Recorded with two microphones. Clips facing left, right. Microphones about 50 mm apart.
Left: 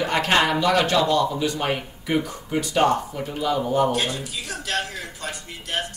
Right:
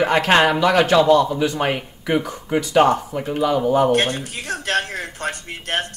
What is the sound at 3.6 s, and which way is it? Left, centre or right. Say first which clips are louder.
Speech: right 4 dB; right.